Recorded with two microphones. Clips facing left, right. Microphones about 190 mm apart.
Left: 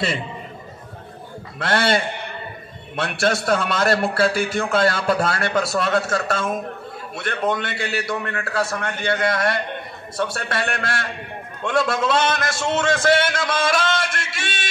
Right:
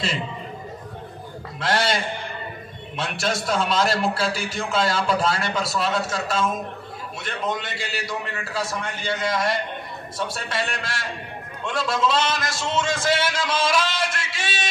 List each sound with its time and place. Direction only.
1.6 s a man's voice: 60° left (ahead or behind)
3.0 s a man's voice: 60° left (ahead or behind)